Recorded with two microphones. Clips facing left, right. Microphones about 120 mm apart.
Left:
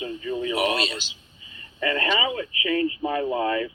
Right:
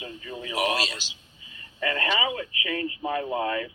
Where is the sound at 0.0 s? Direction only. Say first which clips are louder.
Left 9 dB; 25° left (ahead or behind).